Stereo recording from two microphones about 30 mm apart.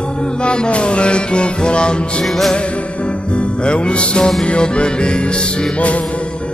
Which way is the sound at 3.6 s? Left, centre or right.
Left.